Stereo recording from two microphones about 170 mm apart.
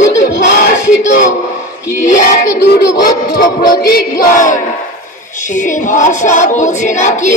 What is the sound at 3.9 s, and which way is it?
Child singing, 60° left (ahead or behind).